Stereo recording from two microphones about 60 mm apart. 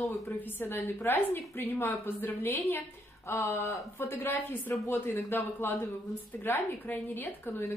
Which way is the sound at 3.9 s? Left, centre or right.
Left.